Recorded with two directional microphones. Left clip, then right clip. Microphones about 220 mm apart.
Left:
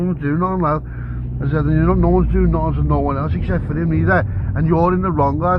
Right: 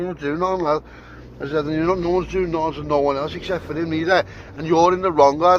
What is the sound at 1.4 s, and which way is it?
Speech, 20° right (ahead or behind).